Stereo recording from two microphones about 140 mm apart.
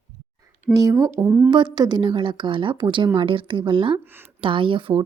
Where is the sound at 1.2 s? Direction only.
15° right (ahead or behind).